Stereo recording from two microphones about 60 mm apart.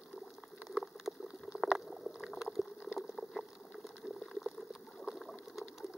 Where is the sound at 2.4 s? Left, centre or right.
Centre.